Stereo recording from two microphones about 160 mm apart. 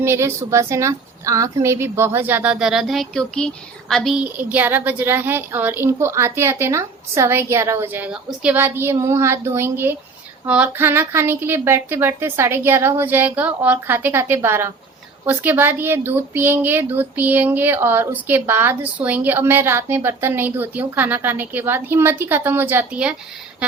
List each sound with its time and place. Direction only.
0.0 s a woman's voice: 15° right (ahead or behind)